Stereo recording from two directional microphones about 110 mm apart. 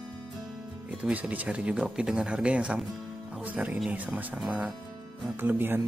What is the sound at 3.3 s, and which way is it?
Music, 15° right (ahead or behind).